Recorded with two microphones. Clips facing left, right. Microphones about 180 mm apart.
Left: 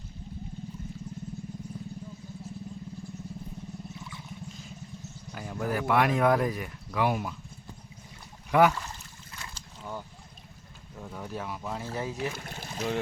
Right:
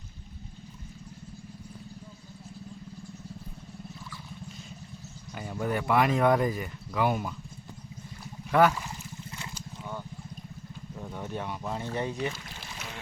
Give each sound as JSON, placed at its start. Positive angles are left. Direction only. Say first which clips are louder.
{"t": 5.3, "sound": "speech", "louder": "right 1 dB", "side_deg": 0}
{"t": 8.5, "sound": "a sound", "louder": "even", "side_deg": 10}
{"t": 11.0, "sound": "speech", "louder": "right 1 dB", "side_deg": 0}
{"t": 12.4, "sound": "boat", "louder": "left 8 dB", "side_deg": 45}